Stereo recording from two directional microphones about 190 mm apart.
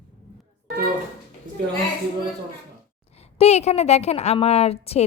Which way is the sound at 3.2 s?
35° left (ahead or behind).